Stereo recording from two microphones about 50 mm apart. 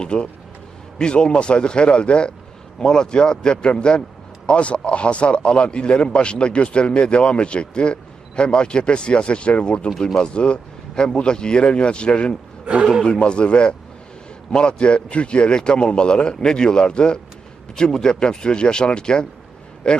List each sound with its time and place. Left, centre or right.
0.0 s a man's voice: centre
12.6 s a man's voice: centre
13.1 s a man's voice: left